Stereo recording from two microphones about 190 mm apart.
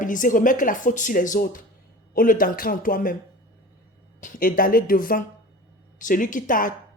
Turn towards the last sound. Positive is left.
turn(degrees=45)  # may be behind; listen again after turning